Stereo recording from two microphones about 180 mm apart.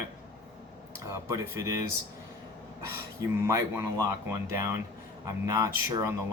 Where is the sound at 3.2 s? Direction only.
15° right (ahead or behind).